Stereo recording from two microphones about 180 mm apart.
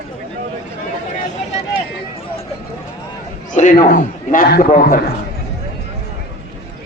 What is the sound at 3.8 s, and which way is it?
A man's voice, 45° left (ahead or behind).